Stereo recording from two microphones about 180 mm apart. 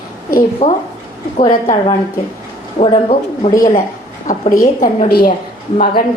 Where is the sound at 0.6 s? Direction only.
40° left (ahead or behind).